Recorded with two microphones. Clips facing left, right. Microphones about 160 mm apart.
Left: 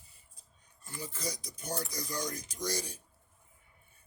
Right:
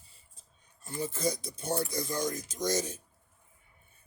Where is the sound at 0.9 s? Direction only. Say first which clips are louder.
Right 8 dB; 25° right (ahead or behind).